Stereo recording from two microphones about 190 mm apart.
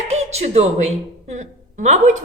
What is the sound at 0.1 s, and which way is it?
A woman's voice, 35° right (ahead or behind).